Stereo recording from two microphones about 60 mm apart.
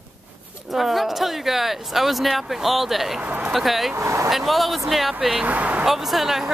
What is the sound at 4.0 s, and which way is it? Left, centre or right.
Speech, right.